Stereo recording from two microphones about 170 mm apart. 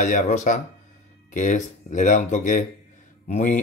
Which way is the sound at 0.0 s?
45° left (ahead or behind).